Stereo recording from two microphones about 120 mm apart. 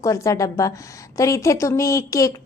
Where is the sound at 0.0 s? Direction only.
25° left (ahead or behind).